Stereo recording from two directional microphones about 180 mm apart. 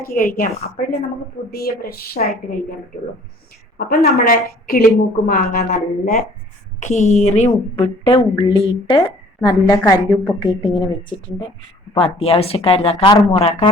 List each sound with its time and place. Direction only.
0.1 s a woman's voice: 55° left (ahead or behind)
3.8 s a woman's voice: 55° left (ahead or behind)
6.7 s a woman's voice: 40° left (ahead or behind)
8.4 s a woman's voice: 20° left (ahead or behind); by 13.7 s 35° left (ahead or behind)